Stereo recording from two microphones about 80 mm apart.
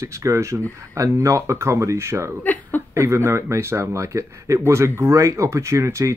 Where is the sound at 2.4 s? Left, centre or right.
Left.